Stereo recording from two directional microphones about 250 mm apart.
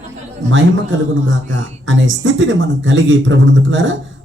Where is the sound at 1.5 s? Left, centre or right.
Right.